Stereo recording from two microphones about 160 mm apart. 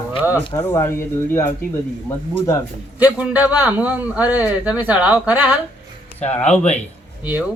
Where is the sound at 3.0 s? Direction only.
10° right (ahead or behind).